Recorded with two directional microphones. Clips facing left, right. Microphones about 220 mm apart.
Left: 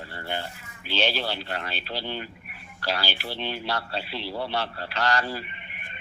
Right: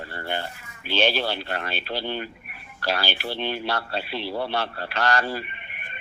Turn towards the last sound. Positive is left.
turn(degrees=-60)  # may be behind; listen again after turning